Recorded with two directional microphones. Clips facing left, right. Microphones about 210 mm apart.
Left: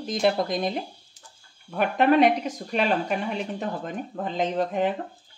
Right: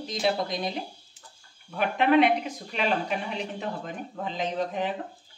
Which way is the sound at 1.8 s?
45° left (ahead or behind).